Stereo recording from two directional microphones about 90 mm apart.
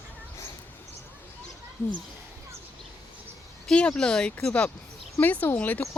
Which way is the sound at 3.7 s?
10° left (ahead or behind).